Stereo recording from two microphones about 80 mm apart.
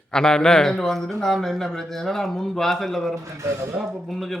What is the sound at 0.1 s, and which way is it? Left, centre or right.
A man's voice, centre.